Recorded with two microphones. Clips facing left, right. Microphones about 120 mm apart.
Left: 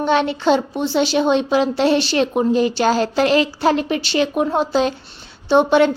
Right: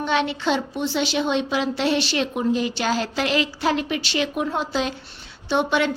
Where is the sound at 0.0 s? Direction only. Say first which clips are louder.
Left 6 dB; 40° left (ahead or behind).